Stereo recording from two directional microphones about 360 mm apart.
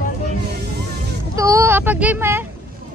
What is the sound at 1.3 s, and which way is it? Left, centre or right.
Speech, centre.